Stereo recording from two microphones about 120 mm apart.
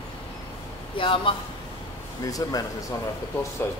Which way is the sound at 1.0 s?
45° left (ahead or behind).